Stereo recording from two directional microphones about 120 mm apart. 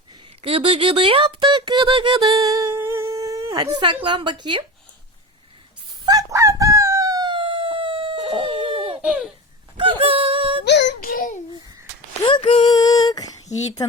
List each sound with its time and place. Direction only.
0.4 s speech: 50° right (ahead or behind)
2.3 s humming: 30° right (ahead or behind)
4.0 s a woman's voice: 40° right (ahead or behind)
6.1 s chicken: 30° right (ahead or behind)
7.3 s a sound: 50° right (ahead or behind)
8.4 s bird: 45° right (ahead or behind)
9.0 s a sound: 10° right (ahead or behind)
9.7 s music: 50° right (ahead or behind)
12.2 s a sound: 45° left (ahead or behind)
12.7 s female singing: 30° left (ahead or behind)